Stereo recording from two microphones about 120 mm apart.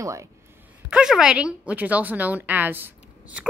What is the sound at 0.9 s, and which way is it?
A woman's voice, 5° right (ahead or behind).